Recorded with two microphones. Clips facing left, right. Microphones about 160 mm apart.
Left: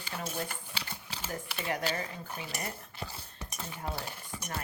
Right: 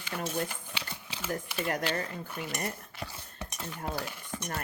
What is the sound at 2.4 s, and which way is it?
Speech, 50° right (ahead or behind).